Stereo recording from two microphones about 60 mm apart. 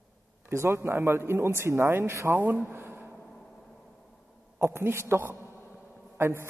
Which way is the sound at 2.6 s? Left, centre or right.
Right.